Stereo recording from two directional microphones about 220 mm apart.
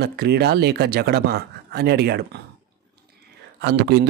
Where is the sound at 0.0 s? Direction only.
45° right (ahead or behind).